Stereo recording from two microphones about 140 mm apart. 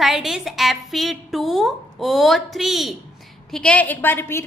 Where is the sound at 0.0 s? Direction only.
Centre (ahead or behind).